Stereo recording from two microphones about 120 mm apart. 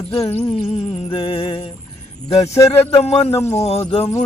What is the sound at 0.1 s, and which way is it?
Speech, 50° left (ahead or behind).